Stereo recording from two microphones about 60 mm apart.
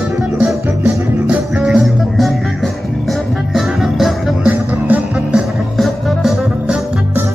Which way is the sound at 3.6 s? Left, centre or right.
Centre.